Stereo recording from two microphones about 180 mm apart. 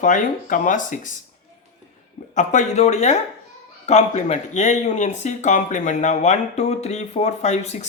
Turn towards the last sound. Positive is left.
turn(degrees=40)  # may be behind; listen again after turning